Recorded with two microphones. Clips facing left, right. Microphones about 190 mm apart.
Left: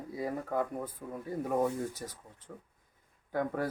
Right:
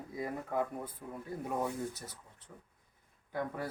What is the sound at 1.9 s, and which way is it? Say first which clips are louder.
Speech: left 4 dB; 90° left.